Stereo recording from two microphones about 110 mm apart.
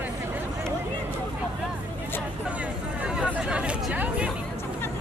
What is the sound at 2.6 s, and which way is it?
Chatter, 10° right (ahead or behind).